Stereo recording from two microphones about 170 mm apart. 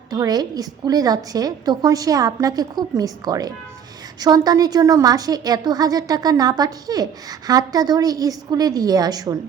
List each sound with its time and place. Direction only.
0.1 s a woman's voice: 20° right (ahead or behind)